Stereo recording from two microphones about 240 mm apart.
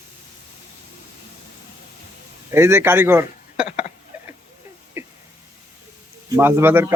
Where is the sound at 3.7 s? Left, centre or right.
Left.